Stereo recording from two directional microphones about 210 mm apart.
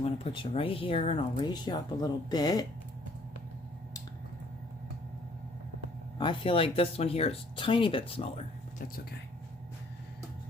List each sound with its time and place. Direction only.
0.0 s speech: 25° left (ahead or behind)
6.1 s speech: 25° left (ahead or behind)